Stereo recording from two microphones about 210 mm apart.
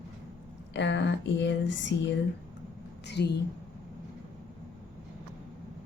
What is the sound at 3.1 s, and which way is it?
Speech, 55° left (ahead or behind).